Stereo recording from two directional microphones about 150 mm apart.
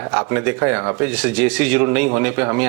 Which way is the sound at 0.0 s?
15° right (ahead or behind).